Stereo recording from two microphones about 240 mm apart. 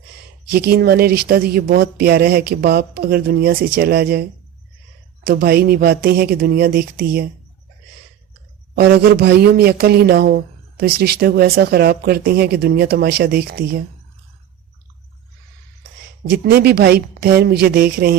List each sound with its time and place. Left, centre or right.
0.4 s speech: right
5.2 s speech: right
8.7 s speech: right
16.3 s speech: right